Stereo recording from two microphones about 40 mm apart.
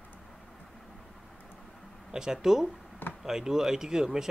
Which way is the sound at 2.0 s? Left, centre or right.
Centre.